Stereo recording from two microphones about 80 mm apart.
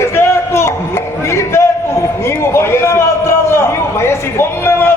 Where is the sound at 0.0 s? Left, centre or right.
Left.